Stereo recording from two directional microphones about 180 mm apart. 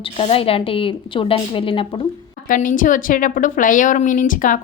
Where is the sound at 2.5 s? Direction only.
50° left (ahead or behind).